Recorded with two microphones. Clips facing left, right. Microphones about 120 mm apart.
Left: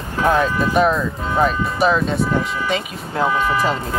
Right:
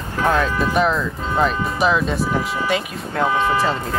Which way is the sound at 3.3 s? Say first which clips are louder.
Right 1 dB; 25° right (ahead or behind).